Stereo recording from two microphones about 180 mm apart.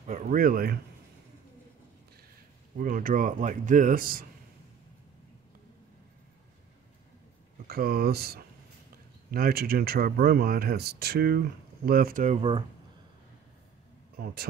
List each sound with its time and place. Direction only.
0.0 s speech: 45° right (ahead or behind)
2.8 s speech: 50° right (ahead or behind)
7.6 s speech: 55° right (ahead or behind)
12.4 s speech: 30° right (ahead or behind)
14.1 s speech: 55° right (ahead or behind)